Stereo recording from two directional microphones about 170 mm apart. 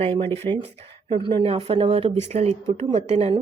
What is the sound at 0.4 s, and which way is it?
A woman's voice, 30° right (ahead or behind).